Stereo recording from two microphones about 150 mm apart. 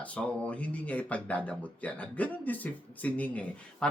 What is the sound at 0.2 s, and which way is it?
Speech, 10° left (ahead or behind).